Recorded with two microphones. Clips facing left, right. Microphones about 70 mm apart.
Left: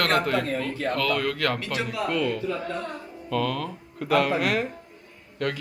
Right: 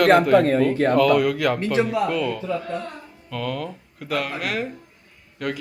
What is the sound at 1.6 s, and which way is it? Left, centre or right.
Speech, right.